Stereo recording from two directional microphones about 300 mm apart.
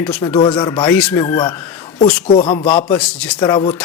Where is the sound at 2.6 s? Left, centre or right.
Centre.